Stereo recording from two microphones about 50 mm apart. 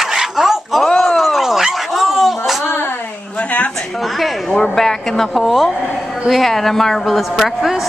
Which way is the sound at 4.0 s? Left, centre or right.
Centre.